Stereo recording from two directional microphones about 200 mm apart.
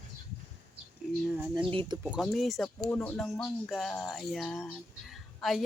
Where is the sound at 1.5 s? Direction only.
25° right (ahead or behind).